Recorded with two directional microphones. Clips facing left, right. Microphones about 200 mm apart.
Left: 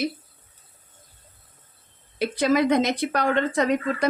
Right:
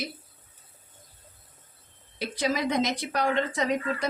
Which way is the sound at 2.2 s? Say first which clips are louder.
Left 7 dB; 60° left (ahead or behind).